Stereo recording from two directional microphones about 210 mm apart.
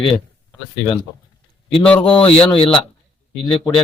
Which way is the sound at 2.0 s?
25° left (ahead or behind).